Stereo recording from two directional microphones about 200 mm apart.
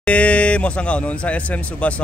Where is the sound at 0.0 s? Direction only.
5° left (ahead or behind).